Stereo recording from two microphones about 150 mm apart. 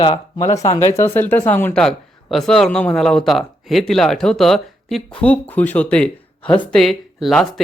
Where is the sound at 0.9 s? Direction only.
15° left (ahead or behind).